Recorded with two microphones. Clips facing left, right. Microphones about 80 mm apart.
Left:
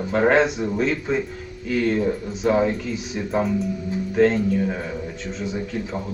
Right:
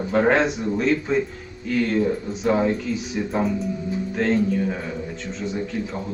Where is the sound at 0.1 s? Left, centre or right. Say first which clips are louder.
Left 1 dB; centre.